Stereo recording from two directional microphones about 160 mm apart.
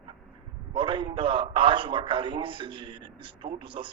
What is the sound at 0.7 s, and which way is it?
A man's voice, 30° right (ahead or behind).